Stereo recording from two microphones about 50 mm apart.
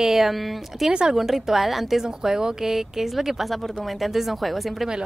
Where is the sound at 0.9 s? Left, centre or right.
Centre.